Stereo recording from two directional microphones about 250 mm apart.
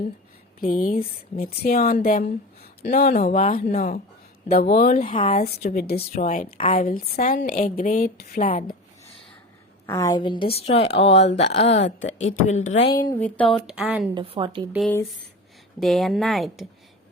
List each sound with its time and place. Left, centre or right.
0.6 s a woman's voice: left
3.4 s a woman's voice: left
5.2 s a woman's voice: left
5.5 s a woman's voice: left
9.8 s a woman's voice: centre; by 12.7 s left
12.8 s speech: centre
14.1 s a woman's voice: centre
14.7 s speech: centre